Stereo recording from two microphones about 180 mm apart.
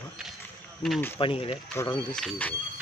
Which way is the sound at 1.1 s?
30° left (ahead or behind).